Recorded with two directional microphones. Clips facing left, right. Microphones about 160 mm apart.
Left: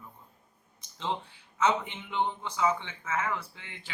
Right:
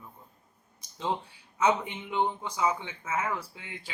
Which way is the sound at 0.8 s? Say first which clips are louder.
Right 2 dB; 10° right (ahead or behind).